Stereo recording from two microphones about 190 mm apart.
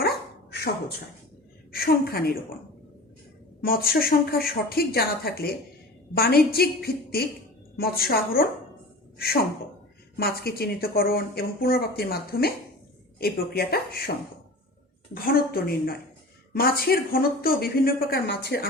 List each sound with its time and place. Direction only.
1.7 s speech: 50° left (ahead or behind)
3.6 s a woman's voice: 50° left (ahead or behind)
15.1 s speech: 50° left (ahead or behind)